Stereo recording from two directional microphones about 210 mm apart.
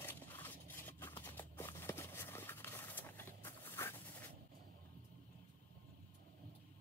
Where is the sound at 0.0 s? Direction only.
10° left (ahead or behind).